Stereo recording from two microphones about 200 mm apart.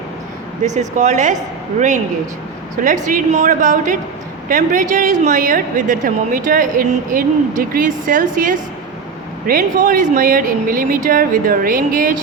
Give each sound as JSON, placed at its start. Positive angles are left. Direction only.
{"t": 0.6, "sound": "a woman's voice", "side_deg": -35}
{"t": 2.8, "sound": "a woman's voice", "side_deg": -40}